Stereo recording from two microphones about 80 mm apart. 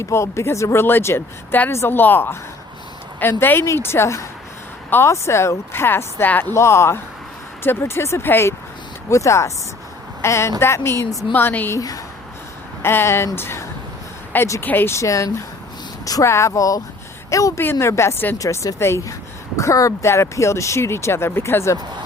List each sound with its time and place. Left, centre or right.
0.0 s speech: left
3.4 s speech: left
12.8 s speech: left
18.3 s speech: left